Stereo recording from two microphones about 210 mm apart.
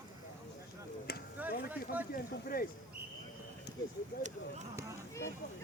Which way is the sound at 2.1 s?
45° left (ahead or behind).